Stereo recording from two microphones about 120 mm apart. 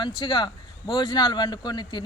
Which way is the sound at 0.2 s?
40° left (ahead or behind).